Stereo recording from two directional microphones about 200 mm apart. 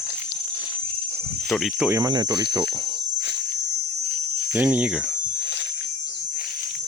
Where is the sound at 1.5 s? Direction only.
10° right (ahead or behind).